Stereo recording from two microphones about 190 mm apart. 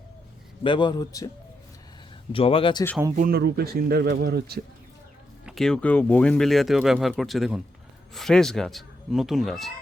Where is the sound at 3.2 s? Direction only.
50° right (ahead or behind).